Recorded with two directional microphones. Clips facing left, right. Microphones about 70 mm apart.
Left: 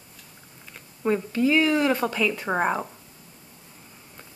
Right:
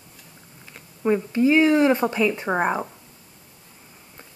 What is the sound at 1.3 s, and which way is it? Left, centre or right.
Speech, right.